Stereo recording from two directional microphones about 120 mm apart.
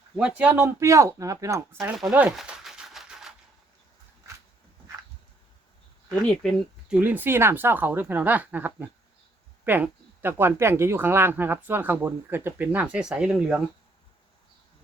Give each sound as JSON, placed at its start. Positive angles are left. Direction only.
{"t": 0.2, "sound": "speech", "side_deg": -10}
{"t": 2.1, "sound": "a sound", "side_deg": -5}
{"t": 6.8, "sound": "speech", "side_deg": -10}